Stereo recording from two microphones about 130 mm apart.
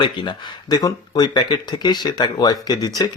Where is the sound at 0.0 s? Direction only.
35° left (ahead or behind).